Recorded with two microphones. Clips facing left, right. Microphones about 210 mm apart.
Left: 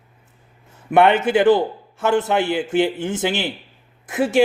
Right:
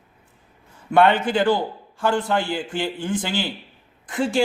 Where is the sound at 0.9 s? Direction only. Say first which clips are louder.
Left 2 dB; 20° left (ahead or behind).